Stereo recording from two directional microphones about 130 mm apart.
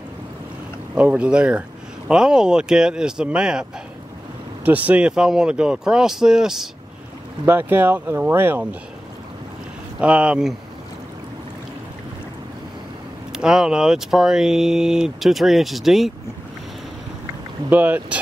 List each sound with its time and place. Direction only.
0.9 s speech: 10° right (ahead or behind)
4.6 s speech: 10° right (ahead or behind)
7.4 s speech: 15° right (ahead or behind)
9.9 s speech: 10° right (ahead or behind)
13.3 s speech: 5° right (ahead or behind)
17.6 s speech: 15° right (ahead or behind)